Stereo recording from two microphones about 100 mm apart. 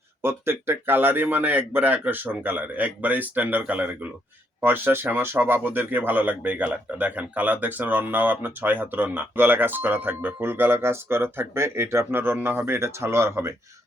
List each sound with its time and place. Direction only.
0.2 s speech: 25° right (ahead or behind)